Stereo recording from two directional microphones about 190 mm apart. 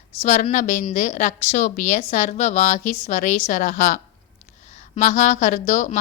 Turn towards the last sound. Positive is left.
turn(degrees=40)  # may be behind; listen again after turning